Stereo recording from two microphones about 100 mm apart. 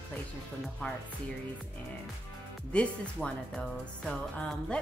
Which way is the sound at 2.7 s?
10° left (ahead or behind).